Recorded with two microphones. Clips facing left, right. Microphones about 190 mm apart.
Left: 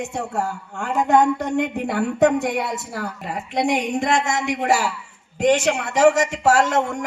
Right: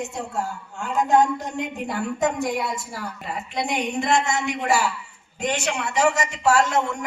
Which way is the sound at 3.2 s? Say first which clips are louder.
Left 6 dB; 85° left.